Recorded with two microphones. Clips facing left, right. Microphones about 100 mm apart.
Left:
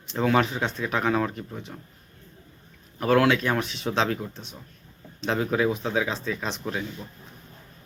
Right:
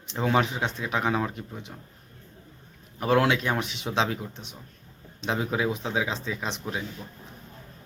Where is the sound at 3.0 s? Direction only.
20° right (ahead or behind).